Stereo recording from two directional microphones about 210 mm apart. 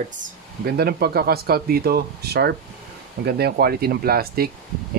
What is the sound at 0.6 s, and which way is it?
Speech, 50° right (ahead or behind).